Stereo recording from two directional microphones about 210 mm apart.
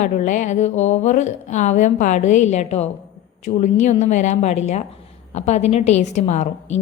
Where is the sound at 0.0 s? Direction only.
35° left (ahead or behind).